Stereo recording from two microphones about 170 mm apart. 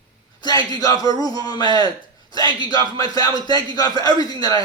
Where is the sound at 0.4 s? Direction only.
25° left (ahead or behind).